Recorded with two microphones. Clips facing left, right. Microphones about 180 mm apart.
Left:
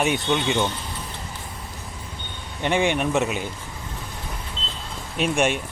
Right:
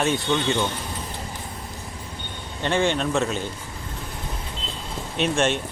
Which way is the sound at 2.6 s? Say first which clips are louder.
Left 1 dB; 15° left (ahead or behind).